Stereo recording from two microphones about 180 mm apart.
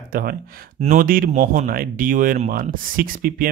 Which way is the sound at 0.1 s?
55° right (ahead or behind).